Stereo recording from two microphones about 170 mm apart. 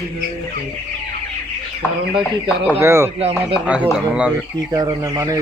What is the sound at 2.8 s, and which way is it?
Speech, 15° right (ahead or behind).